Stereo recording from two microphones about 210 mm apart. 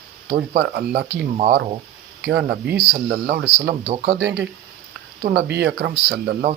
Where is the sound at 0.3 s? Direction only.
50° right (ahead or behind).